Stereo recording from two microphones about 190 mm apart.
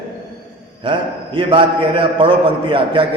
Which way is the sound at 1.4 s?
25° right (ahead or behind).